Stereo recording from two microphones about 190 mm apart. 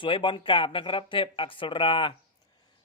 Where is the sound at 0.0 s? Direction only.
25° left (ahead or behind).